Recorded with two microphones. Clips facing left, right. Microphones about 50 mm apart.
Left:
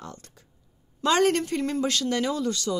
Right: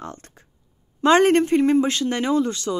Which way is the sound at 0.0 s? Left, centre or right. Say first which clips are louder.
Right 6 dB; right.